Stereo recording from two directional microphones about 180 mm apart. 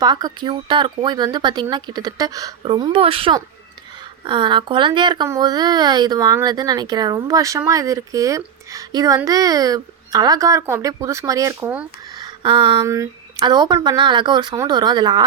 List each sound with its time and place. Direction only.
0.0 s speech: 20° right (ahead or behind)
12.1 s speech: 25° right (ahead or behind)